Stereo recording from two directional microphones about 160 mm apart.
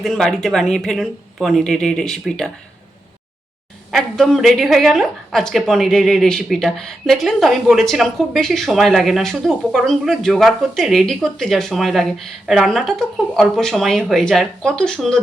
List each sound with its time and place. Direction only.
0.0 s a woman's voice: centre (ahead or behind)
3.9 s a woman's voice: centre (ahead or behind)